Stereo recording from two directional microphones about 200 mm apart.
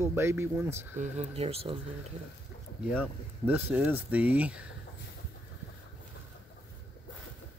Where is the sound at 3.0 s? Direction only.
10° right (ahead or behind).